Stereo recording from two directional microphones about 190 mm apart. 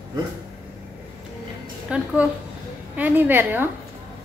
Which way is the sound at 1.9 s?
5° right (ahead or behind).